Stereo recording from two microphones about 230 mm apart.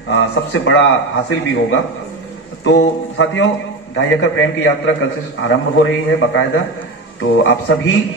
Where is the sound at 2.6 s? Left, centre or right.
Left.